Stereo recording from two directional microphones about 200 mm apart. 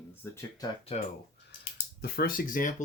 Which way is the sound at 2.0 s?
50° left (ahead or behind).